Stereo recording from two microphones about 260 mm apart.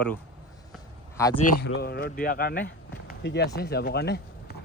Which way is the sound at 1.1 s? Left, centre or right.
Centre.